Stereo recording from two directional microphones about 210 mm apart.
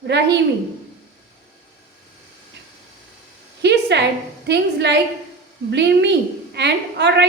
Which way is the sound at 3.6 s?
55° right (ahead or behind).